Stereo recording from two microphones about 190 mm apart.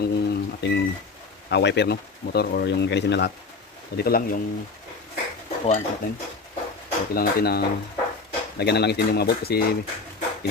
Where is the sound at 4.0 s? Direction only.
50° left (ahead or behind).